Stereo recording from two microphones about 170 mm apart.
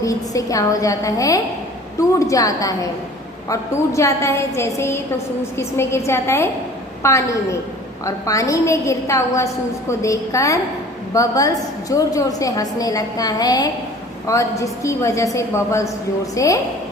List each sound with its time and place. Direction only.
0.0 s a woman's voice: 20° left (ahead or behind)